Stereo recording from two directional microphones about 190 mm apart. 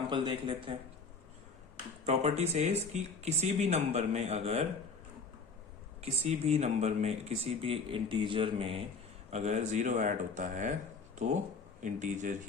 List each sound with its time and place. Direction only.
0.1 s speech: 25° right (ahead or behind)
2.0 s speech: 35° right (ahead or behind)
6.0 s speech: 30° right (ahead or behind)